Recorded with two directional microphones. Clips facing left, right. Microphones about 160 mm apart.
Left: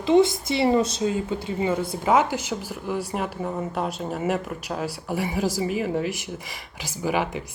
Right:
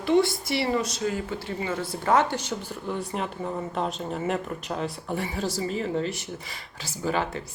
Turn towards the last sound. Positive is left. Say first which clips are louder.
# left 2 dB
turn(degrees=15)  # may be behind; listen again after turning